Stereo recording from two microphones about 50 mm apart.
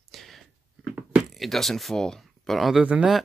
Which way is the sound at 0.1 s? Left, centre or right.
Centre.